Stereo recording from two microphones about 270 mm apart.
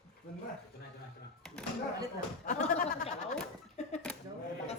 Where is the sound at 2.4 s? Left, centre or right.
Left.